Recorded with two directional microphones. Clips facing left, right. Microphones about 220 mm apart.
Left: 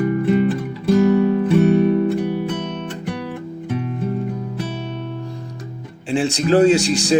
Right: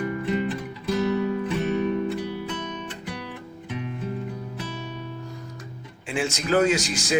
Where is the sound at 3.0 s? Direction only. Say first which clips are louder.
Left 9 dB; 50° left (ahead or behind).